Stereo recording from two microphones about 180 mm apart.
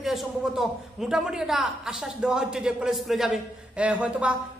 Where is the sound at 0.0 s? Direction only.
Centre (ahead or behind).